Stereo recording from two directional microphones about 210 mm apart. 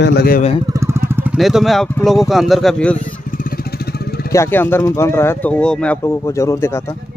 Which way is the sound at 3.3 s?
40° left (ahead or behind).